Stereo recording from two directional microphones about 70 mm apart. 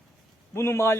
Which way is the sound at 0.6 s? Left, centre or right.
Left.